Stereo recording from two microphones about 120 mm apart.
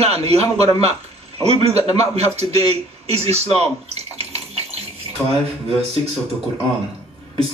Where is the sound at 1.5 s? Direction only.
60° right (ahead or behind).